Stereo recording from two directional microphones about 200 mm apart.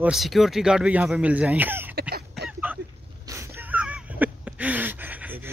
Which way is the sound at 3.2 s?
15° right (ahead or behind).